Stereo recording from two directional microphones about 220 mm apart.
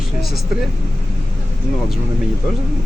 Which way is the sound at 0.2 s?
Centre (ahead or behind).